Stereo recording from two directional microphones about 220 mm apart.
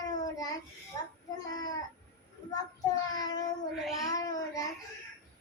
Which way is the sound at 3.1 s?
15° left (ahead or behind).